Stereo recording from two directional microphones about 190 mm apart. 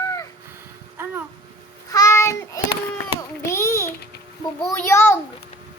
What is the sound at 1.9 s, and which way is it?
Child singing, 15° left (ahead or behind).